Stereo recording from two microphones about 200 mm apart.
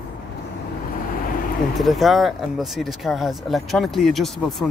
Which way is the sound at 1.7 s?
Centre (ahead or behind).